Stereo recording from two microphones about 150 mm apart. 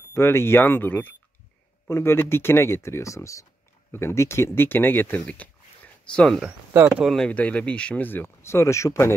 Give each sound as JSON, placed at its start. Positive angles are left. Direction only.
{"t": 0.1, "sound": "speech", "side_deg": 15}
{"t": 6.7, "sound": "speech", "side_deg": -10}
{"t": 7.2, "sound": "speech", "side_deg": 10}